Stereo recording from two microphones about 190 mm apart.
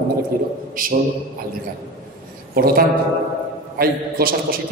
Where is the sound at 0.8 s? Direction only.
45° right (ahead or behind).